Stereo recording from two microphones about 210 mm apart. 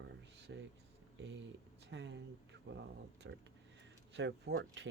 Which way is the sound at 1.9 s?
55° right (ahead or behind).